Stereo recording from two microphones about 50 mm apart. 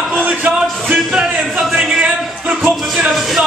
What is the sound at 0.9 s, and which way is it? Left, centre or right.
Speech, centre.